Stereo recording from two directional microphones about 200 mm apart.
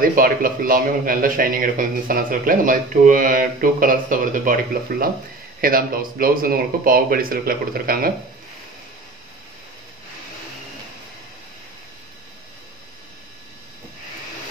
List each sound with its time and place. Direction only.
0.0 s a man's voice: 45° right (ahead or behind)